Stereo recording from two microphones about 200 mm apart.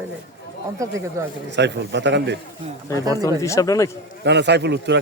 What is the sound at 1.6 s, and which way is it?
Speech, 60° right (ahead or behind).